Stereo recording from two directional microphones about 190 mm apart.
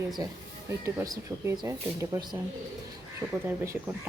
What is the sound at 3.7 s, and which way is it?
Speech, 15° right (ahead or behind).